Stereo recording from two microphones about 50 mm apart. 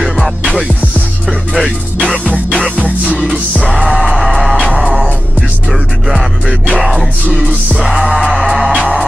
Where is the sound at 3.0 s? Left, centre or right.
Centre.